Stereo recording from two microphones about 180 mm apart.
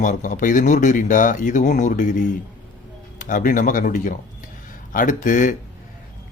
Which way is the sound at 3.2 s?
50° left (ahead or behind).